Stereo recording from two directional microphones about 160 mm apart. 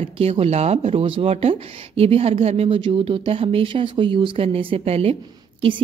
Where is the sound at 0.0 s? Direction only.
40° right (ahead or behind).